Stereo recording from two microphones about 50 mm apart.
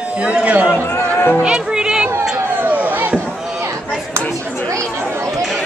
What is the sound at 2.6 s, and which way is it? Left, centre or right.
Chop, right.